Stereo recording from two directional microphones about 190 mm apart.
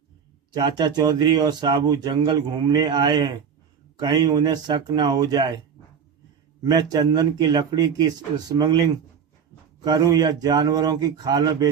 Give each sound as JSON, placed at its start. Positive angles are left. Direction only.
{"t": 0.5, "sound": "speech", "side_deg": -20}
{"t": 6.6, "sound": "speech", "side_deg": -20}